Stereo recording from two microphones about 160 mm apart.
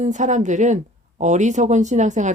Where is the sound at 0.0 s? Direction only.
50° right (ahead or behind).